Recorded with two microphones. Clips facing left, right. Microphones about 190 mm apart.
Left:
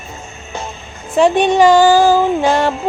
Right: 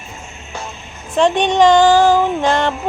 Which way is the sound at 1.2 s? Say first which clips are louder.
Left 2 dB; 10° left (ahead or behind).